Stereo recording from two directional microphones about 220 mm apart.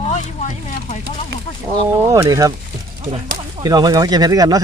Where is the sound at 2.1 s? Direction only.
15° right (ahead or behind).